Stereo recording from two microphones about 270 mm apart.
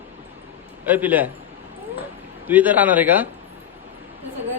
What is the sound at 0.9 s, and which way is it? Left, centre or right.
Speech, centre.